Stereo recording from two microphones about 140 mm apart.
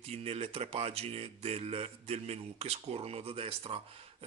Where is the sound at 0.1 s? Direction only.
45° right (ahead or behind).